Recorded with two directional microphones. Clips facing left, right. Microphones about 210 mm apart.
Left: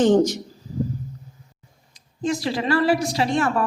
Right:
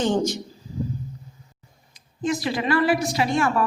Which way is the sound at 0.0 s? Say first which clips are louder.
Left 6 dB; 40° left (ahead or behind).